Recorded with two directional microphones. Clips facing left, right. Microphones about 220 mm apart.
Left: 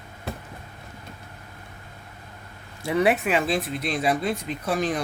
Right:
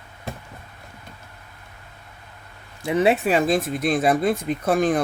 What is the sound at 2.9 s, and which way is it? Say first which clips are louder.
Speech: right 3 dB; 20° right (ahead or behind).